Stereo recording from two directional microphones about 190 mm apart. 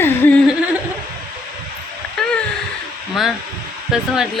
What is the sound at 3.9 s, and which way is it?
Speech, centre (ahead or behind).